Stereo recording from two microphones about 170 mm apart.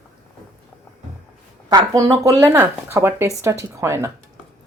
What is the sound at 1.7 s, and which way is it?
Speech, 20° right (ahead or behind).